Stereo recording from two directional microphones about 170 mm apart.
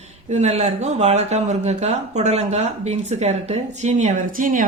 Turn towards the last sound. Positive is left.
turn(degrees=-55)  # may be behind; listen again after turning